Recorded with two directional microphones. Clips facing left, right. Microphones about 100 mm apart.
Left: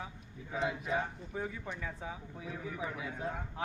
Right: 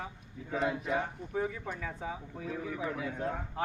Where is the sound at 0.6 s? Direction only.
Centre (ahead or behind).